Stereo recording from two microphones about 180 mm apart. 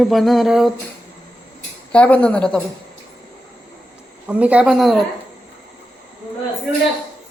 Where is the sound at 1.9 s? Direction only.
10° left (ahead or behind).